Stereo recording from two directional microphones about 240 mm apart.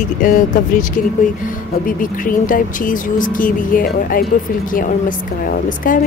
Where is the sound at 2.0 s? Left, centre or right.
Left.